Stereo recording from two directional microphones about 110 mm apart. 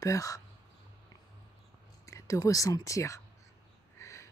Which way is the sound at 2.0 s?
30° left (ahead or behind).